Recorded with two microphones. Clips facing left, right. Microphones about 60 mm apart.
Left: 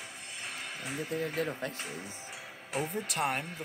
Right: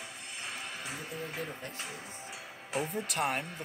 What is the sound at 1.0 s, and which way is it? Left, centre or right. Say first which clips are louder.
Speech: left 9 dB; left.